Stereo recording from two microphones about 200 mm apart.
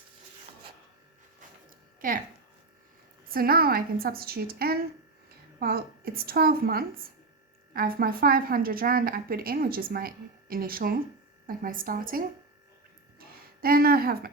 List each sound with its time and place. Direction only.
2.0 s speech: 45° right (ahead or behind)
3.2 s a woman's voice: 50° right (ahead or behind)
13.1 s a sound: 50° right (ahead or behind)